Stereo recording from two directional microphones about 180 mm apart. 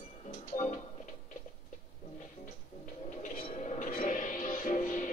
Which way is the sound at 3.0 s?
45° left (ahead or behind).